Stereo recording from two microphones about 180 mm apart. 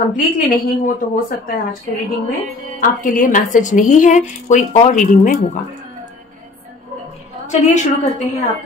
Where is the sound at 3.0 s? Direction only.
50° left (ahead or behind).